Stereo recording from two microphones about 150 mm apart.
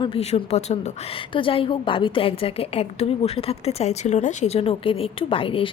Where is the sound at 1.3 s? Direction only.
35° left (ahead or behind).